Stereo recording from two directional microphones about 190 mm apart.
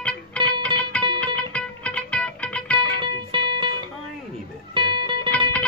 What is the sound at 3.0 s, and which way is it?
Music, 25° right (ahead or behind).